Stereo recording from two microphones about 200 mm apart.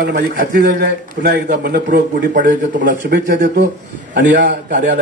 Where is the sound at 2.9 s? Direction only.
60° right (ahead or behind).